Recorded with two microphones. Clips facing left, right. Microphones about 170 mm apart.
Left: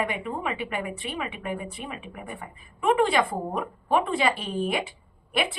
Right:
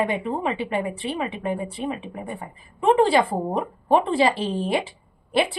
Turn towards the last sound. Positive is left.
turn(degrees=-30)  # may be behind; listen again after turning